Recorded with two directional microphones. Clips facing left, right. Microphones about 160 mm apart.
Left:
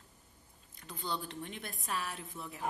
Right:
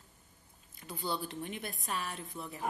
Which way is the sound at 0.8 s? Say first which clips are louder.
Right 2 dB; 5° right (ahead or behind).